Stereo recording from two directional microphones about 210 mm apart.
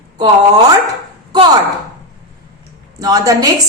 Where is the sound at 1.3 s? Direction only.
20° right (ahead or behind).